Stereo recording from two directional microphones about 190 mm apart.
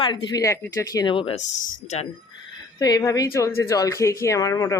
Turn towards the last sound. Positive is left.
turn(degrees=20)  # may be behind; listen again after turning